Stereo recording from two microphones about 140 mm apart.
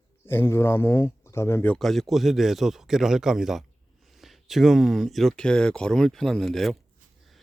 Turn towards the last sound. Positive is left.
turn(degrees=0)  # may be behind; listen again after turning